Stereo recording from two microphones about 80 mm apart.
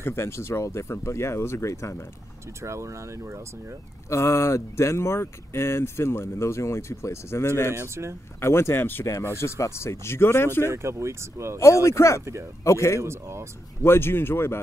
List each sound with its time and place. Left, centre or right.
0.0 s speech: left
2.6 s speech: right
4.1 s speech: left
7.7 s speech: right
8.4 s speech: left
10.7 s speech: right
11.6 s speech: left
13.0 s speech: right
13.8 s speech: left